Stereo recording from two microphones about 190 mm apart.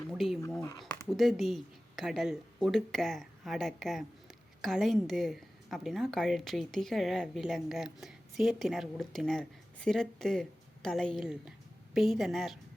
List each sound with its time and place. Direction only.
0.1 s speech: centre (ahead or behind)
0.6 s speech: 20° left (ahead or behind)
1.0 s a woman's voice: centre (ahead or behind)